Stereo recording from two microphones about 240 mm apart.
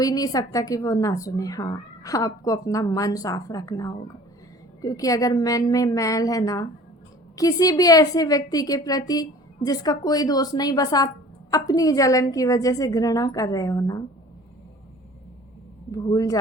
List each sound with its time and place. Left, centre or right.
0.0 s a woman's voice: centre
15.9 s a woman's voice: centre